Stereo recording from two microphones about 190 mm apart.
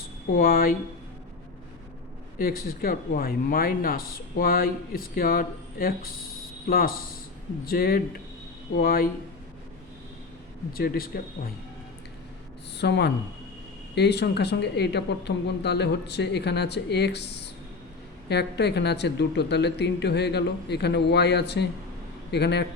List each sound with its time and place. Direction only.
0.3 s speech: 50° left (ahead or behind)
2.4 s speech: 50° left (ahead or behind)
10.7 s speech: 50° left (ahead or behind)
12.7 s speech: 60° left (ahead or behind)